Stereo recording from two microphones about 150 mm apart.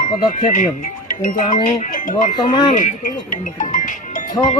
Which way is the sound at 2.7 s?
60° left (ahead or behind).